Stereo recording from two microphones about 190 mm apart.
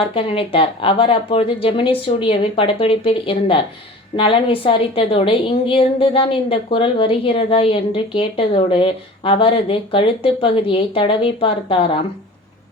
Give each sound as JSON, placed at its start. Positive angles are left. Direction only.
{"t": 0.0, "sound": "a woman's voice", "side_deg": 30}